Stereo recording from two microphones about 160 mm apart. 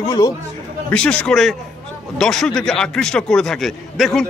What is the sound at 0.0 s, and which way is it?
Speech, 25° left (ahead or behind).